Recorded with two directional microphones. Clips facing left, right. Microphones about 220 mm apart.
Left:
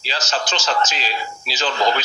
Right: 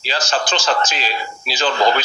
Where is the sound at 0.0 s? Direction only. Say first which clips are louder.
Right 3 dB; 55° right (ahead or behind).